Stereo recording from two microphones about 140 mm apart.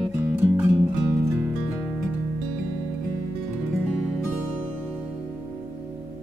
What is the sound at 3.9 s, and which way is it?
Music, 5° right (ahead or behind).